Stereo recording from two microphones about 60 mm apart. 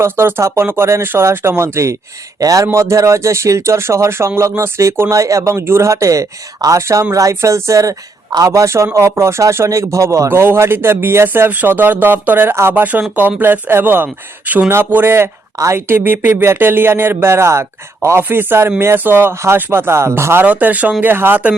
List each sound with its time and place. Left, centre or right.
0.0 s speech: right
2.4 s a man's voice: right
2.7 s speech: right
10.2 s speech: right
12.8 s speech: right
18.3 s speech: right
20.4 s speech: right